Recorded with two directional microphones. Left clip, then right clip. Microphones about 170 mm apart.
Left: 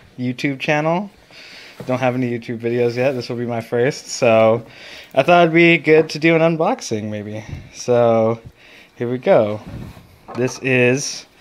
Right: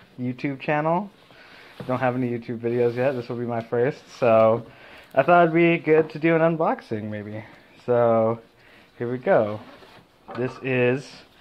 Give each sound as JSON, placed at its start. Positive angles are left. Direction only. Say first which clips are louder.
{"t": 0.2, "sound": "speech", "louder": "left 7 dB", "side_deg": 25}
{"t": 10.6, "sound": "speech", "louder": "left 7 dB", "side_deg": 30}